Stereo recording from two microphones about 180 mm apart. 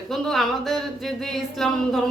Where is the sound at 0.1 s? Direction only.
Centre (ahead or behind).